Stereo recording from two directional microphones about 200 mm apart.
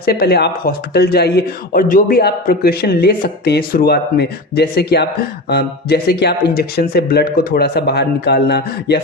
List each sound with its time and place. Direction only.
0.0 s speech: 50° left (ahead or behind)